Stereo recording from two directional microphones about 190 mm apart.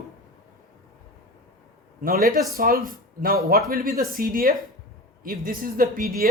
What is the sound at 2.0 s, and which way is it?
A woman's voice, 50° right (ahead or behind).